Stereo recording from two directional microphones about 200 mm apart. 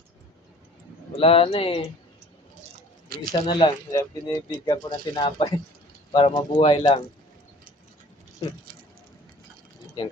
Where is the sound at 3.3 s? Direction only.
20° left (ahead or behind).